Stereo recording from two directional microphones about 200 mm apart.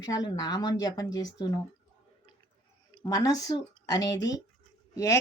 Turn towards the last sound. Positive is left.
turn(degrees=15)  # may be behind; listen again after turning